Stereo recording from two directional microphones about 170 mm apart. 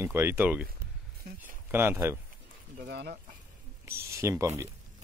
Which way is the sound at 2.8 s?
70° right (ahead or behind).